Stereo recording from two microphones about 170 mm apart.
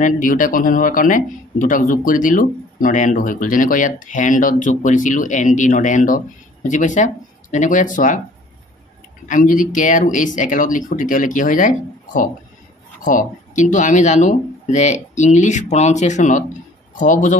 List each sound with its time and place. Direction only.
0.0 s speech: 50° left (ahead or behind)
9.3 s speech: 50° left (ahead or behind)